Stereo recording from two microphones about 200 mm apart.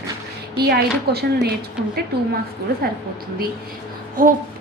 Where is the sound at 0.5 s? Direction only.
55° right (ahead or behind).